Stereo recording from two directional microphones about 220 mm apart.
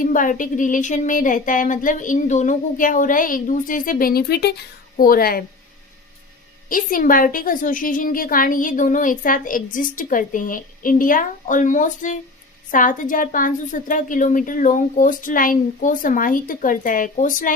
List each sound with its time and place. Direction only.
0.0 s a woman's voice: 35° left (ahead or behind)
6.7 s a woman's voice: 40° left (ahead or behind)